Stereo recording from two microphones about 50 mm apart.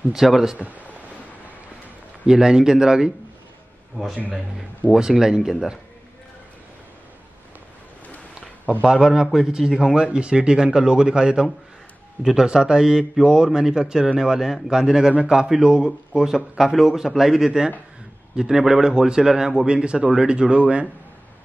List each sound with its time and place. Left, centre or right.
0.1 s a man's voice: centre
0.6 s speech: right
2.2 s a man's voice: centre
4.9 s a man's voice: centre
8.8 s a man's voice: centre